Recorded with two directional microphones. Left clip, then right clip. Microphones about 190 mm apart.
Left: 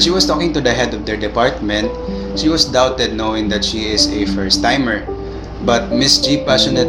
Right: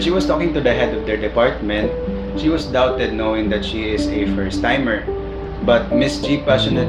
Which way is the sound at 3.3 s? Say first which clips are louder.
Left 2 dB; 45° left (ahead or behind).